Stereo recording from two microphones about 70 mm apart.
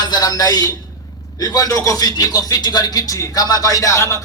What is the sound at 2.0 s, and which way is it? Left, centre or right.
Speech, left.